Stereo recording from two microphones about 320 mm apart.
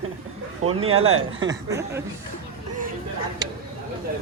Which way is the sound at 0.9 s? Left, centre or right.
Right.